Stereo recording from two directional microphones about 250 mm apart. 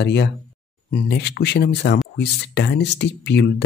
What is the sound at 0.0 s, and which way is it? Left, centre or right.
Speech, left.